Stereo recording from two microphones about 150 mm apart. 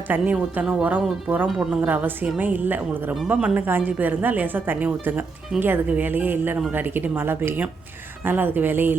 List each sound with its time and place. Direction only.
0.1 s speech: 10° right (ahead or behind)